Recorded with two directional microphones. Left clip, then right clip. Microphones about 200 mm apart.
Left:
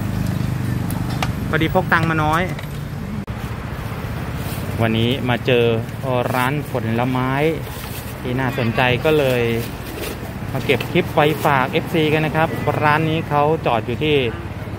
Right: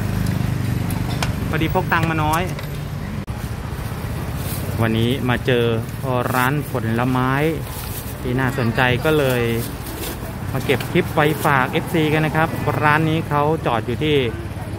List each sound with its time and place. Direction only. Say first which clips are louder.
1.2 s speech: left 3 dB; 10° left (ahead or behind)
4.7 s speech: left 1 dB; 15° right (ahead or behind)
10.7 s speech: left 1 dB; 15° right (ahead or behind)